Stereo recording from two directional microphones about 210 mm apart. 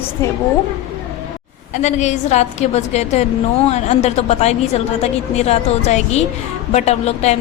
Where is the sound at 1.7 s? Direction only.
35° left (ahead or behind).